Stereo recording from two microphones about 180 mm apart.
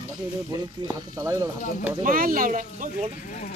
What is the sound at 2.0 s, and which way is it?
Speech, 50° right (ahead or behind).